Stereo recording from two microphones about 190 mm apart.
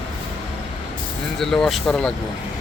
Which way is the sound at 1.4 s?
Centre (ahead or behind).